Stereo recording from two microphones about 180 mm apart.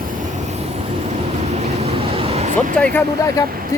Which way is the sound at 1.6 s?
30° right (ahead or behind).